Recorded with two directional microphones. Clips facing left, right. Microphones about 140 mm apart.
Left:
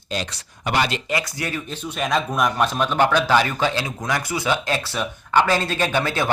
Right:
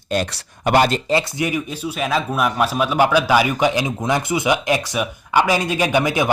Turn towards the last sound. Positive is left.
turn(degrees=-15)  # may be behind; listen again after turning